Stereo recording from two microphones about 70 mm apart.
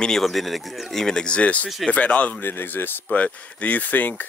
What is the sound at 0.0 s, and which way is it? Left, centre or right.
Speech, centre.